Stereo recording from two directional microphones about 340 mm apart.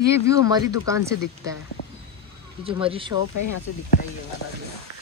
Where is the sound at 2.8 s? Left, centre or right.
Centre.